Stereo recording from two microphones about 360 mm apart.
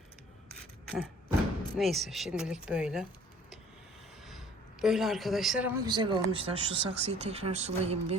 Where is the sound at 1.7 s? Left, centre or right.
Centre.